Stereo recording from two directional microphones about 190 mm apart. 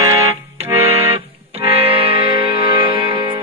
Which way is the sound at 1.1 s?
30° right (ahead or behind).